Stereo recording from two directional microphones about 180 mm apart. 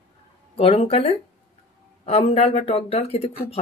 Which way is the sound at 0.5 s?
30° left (ahead or behind).